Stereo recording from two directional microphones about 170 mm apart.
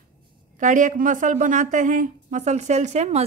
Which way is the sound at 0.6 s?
50° right (ahead or behind).